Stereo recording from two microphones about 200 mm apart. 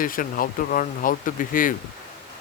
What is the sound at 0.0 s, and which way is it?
Speech, 45° left (ahead or behind).